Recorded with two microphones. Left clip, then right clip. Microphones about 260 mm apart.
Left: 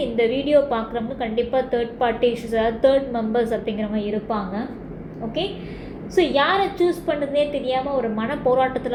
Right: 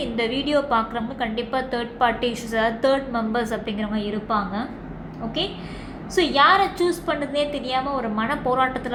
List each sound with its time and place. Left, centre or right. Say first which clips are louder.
0.2 s a woman's voice: left 5 dB; right
6.1 s a woman's voice: right 2 dB; right